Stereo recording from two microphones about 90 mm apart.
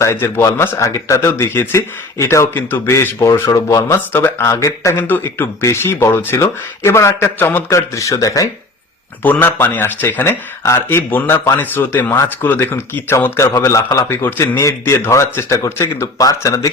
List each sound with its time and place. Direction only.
0.0 s speech: 30° left (ahead or behind)
4.9 s speech: 20° left (ahead or behind)
7.7 s speech: 35° left (ahead or behind)
9.2 s speech: 20° left (ahead or behind); by 16.7 s 35° left (ahead or behind)